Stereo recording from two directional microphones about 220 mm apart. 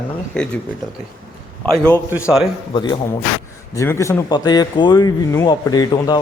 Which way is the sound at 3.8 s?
15° left (ahead or behind).